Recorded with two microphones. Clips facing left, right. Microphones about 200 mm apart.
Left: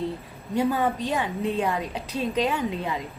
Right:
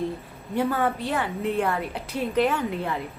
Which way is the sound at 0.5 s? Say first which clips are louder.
Left 1 dB; 15° left (ahead or behind).